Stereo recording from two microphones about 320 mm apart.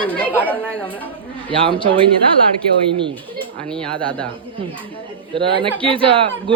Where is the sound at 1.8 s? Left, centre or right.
Centre.